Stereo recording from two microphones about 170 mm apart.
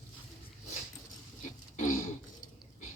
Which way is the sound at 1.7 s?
50° left (ahead or behind).